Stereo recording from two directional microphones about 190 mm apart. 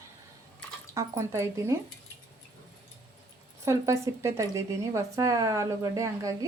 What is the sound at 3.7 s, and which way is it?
Speech, 15° right (ahead or behind).